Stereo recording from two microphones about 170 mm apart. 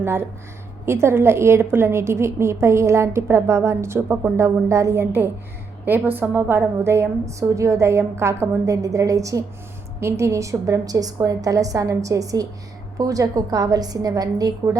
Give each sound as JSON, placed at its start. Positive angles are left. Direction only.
{"t": 0.0, "sound": "a woman's voice", "side_deg": -15}